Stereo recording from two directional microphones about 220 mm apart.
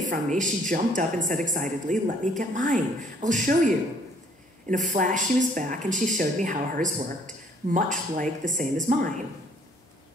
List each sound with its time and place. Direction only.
0.0 s speech: 35° right (ahead or behind)
4.6 s speech: 35° right (ahead or behind)